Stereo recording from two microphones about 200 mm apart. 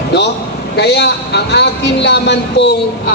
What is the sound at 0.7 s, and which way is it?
A woman's voice, 55° left (ahead or behind).